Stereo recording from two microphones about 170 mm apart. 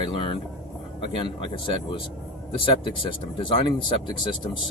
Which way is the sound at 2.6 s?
30° left (ahead or behind).